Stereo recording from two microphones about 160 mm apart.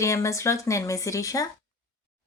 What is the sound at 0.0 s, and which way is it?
Speech, 20° left (ahead or behind).